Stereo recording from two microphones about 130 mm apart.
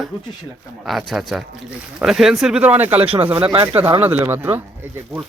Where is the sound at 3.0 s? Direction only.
45° right (ahead or behind).